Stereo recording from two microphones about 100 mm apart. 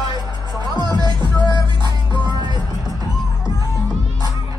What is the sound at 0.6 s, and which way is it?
Music, 45° right (ahead or behind).